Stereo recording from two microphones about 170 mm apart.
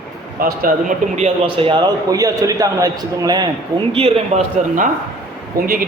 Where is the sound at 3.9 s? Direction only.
35° right (ahead or behind).